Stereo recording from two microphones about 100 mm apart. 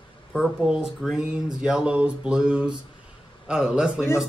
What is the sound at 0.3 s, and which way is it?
Speech, 5° right (ahead or behind).